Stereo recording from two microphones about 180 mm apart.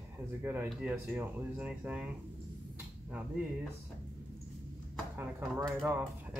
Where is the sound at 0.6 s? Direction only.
10° right (ahead or behind).